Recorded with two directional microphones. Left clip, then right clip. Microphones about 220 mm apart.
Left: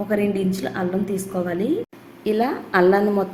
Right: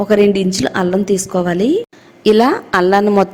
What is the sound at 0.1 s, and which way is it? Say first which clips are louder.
A woman's voice: right 10 dB; 40° right (ahead or behind).